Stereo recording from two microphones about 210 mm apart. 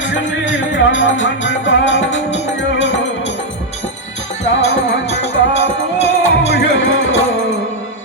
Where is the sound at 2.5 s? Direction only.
60° left (ahead or behind).